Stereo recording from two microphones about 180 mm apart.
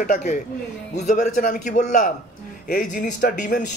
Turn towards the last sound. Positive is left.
turn(degrees=45)  # may be behind; listen again after turning